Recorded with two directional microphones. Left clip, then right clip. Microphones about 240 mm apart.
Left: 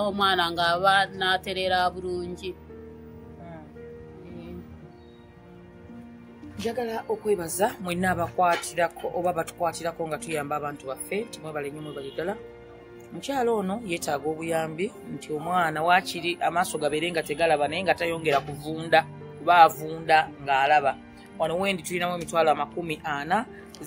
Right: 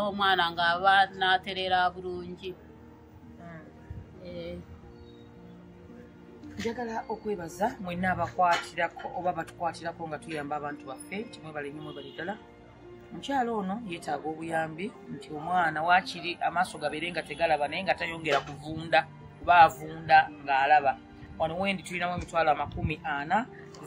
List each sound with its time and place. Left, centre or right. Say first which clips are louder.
0.0 s speech: left 2 dB; left
6.8 s speech: left 5 dB; left